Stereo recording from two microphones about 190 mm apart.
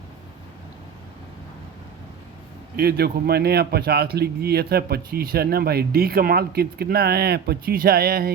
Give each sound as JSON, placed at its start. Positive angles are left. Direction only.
{"t": 2.7, "sound": "speech", "side_deg": -55}